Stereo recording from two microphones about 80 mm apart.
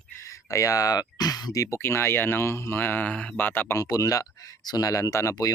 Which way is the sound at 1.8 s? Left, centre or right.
Left.